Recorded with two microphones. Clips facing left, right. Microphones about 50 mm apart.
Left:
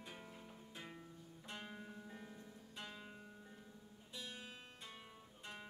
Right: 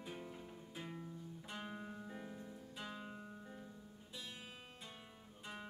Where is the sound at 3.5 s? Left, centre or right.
Centre.